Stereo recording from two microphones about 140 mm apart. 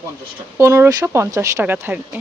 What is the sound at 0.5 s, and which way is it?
Speech, 20° right (ahead or behind).